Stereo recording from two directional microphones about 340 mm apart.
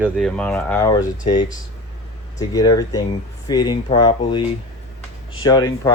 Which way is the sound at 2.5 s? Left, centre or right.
Centre.